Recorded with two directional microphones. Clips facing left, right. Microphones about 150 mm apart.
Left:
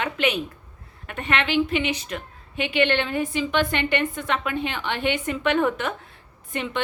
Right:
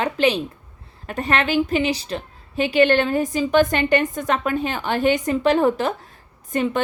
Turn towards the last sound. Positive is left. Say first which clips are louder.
# right 8 dB
turn(degrees=-40)  # may be behind; listen again after turning